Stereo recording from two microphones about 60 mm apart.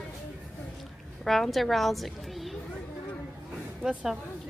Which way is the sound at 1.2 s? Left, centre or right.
Centre.